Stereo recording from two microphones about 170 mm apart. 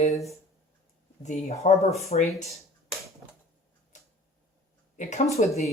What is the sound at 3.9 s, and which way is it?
Tick-tock, 45° left (ahead or behind).